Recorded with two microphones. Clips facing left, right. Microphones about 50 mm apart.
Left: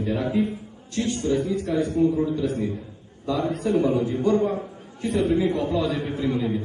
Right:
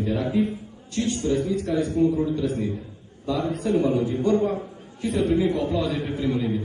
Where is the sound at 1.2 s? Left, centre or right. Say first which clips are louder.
Left 1 dB; centre.